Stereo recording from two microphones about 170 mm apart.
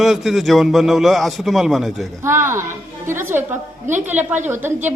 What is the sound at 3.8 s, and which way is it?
Speech, 45° right (ahead or behind).